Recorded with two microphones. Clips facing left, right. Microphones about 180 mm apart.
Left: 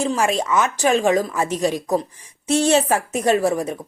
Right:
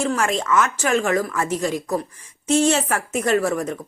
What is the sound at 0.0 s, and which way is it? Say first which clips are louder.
Speech: left 2 dB; 15° left (ahead or behind).